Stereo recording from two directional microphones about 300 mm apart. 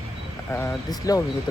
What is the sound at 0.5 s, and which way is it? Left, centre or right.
Speech, centre.